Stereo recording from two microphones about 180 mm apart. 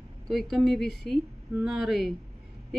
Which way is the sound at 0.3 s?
Centre (ahead or behind).